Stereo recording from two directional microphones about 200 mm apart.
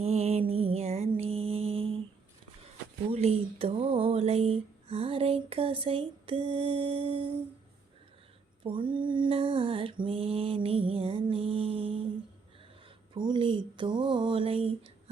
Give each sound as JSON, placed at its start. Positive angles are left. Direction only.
{"t": 0.0, "sound": "music", "side_deg": -30}
{"t": 0.5, "sound": "mantra", "side_deg": -30}
{"t": 3.1, "sound": "speech", "side_deg": -30}
{"t": 8.6, "sound": "speech", "side_deg": -25}
{"t": 13.1, "sound": "a sound", "side_deg": -25}